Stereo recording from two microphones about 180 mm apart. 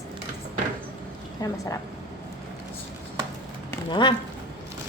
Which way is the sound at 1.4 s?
20° left (ahead or behind).